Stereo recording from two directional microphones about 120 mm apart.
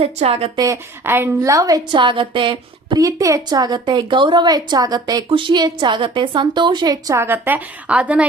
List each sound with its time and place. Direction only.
0.0 s speech: 60° right (ahead or behind)
0.5 s a woman's voice: 30° right (ahead or behind)
3.0 s a woman's voice: 25° right (ahead or behind)
5.3 s a woman's voice: 40° right (ahead or behind); by 8.3 s 10° right (ahead or behind)